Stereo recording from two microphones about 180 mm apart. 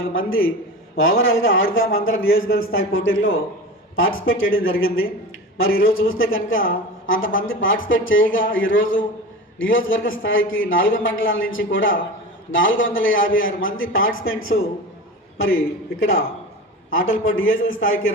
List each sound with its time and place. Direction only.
0.0 s a man's voice: 90° left